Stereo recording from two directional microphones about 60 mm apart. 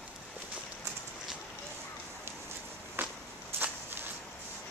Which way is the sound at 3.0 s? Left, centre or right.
Right.